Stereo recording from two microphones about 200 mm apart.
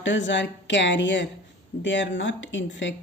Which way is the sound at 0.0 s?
65° left (ahead or behind).